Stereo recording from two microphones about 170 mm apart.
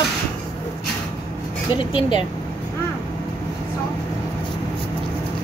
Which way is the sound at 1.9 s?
30° left (ahead or behind).